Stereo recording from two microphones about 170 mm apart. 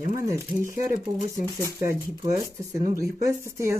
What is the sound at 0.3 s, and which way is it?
Speech, 15° right (ahead or behind).